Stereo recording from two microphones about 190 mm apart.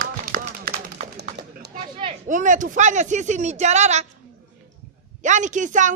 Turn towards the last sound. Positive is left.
turn(degrees=-40)  # may be behind; listen again after turning